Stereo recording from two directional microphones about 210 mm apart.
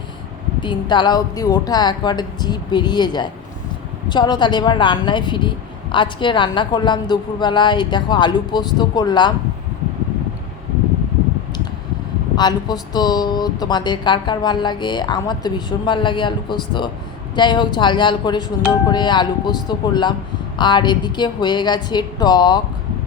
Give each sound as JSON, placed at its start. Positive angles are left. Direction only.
{"t": 0.6, "sound": "a woman's voice", "side_deg": 20}
{"t": 12.4, "sound": "a woman's voice", "side_deg": 20}